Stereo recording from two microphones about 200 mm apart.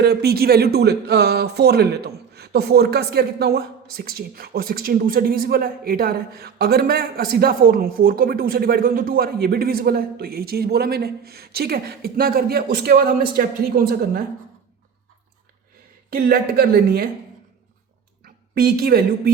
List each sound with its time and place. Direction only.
0.0 s speech: 55° right (ahead or behind)
16.0 s speech: 50° right (ahead or behind)
18.5 s speech: 50° right (ahead or behind)